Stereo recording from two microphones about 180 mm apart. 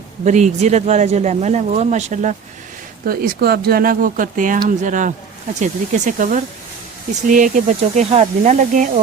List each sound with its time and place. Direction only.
0.3 s speech: 40° right (ahead or behind)
3.1 s speech: 60° right (ahead or behind)